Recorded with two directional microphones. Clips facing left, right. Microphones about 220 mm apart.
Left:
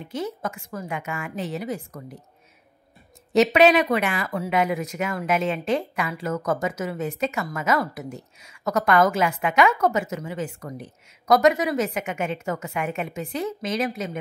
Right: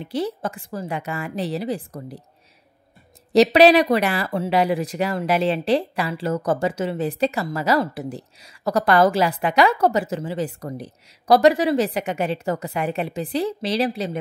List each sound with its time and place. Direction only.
0.0 s speech: 35° right (ahead or behind)
3.3 s speech: 35° right (ahead or behind)